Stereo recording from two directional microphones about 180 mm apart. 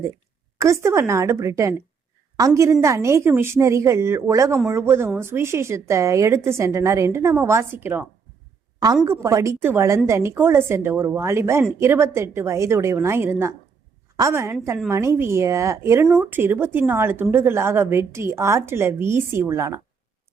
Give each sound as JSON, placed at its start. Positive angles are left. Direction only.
{"t": 0.6, "sound": "a woman's voice", "side_deg": -15}
{"t": 9.0, "sound": "a woman's voice", "side_deg": -15}
{"t": 16.0, "sound": "a woman's voice", "side_deg": 0}